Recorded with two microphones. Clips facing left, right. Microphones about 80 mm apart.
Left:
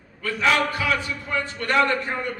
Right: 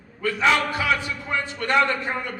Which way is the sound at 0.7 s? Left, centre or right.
Right.